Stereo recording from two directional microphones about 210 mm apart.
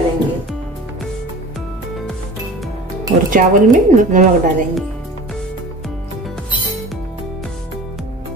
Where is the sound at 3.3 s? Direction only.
40° right (ahead or behind).